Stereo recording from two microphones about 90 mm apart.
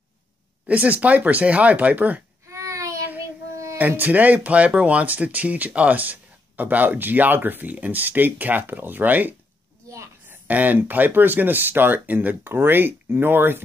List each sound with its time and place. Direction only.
0.7 s speech: 15° right (ahead or behind)
2.5 s child singing: 35° right (ahead or behind)
3.7 s speech: 20° right (ahead or behind)